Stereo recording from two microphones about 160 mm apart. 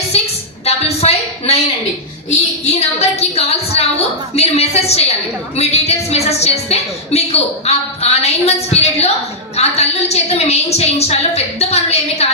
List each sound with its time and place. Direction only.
0.1 s a sound: 40° left (ahead or behind)
0.7 s a woman's voice: 40° left (ahead or behind)
2.6 s a woman's voice: 40° left (ahead or behind)